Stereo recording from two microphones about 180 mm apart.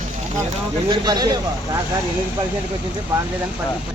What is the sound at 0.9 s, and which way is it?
Speech, 20° right (ahead or behind).